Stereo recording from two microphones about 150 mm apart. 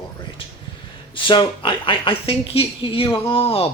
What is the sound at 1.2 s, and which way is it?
Speech, 35° left (ahead or behind).